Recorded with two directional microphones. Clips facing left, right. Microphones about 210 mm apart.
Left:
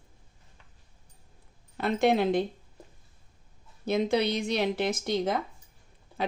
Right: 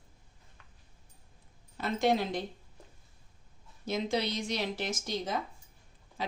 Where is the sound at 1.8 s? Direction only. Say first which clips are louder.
Left 4 dB; 60° left (ahead or behind).